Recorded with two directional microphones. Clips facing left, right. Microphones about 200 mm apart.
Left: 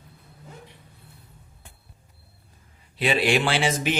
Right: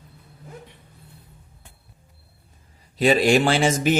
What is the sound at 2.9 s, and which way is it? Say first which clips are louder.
Speech: right 5 dB; 40° right (ahead or behind).